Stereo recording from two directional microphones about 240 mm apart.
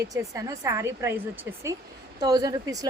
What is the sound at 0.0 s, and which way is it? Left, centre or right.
Speech, centre.